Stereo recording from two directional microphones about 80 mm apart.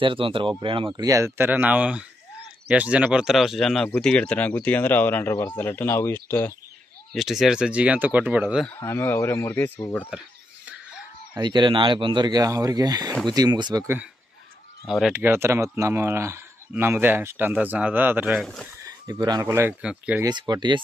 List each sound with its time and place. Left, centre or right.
0.0 s speech: right
0.9 s speech: right
1.2 s speech: right; by 6.5 s left
7.2 s speech: centre
9.0 s speech: left
11.3 s speech: right
14.9 s speech: centre
15.1 s speech: right
18.8 s a sound: right
19.1 s speech: right
19.4 s speech: right
19.8 s speech: centre
20.2 s speech: right